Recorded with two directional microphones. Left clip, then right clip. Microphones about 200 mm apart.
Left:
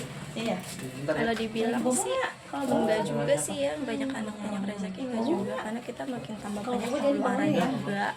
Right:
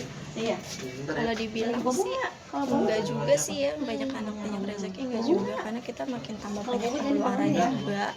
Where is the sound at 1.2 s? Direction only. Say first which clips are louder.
Right 2 dB; 5° left (ahead or behind).